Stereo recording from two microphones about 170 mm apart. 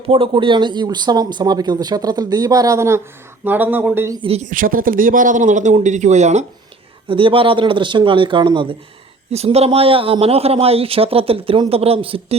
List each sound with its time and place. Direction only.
0.1 s speech: 30° right (ahead or behind); by 4.2 s 15° right (ahead or behind)
4.2 s speech: 40° right (ahead or behind)
7.1 s speech: 30° right (ahead or behind)